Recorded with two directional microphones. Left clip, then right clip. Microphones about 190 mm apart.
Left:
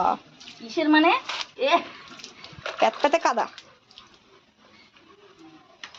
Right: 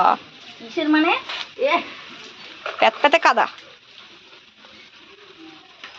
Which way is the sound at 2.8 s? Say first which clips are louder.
Right 6 dB; 5° right (ahead or behind).